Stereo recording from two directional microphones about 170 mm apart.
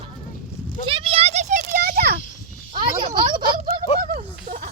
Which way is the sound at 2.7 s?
30° right (ahead or behind).